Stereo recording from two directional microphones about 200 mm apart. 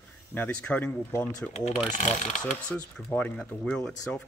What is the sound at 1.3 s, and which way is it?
Speech, 35° left (ahead or behind).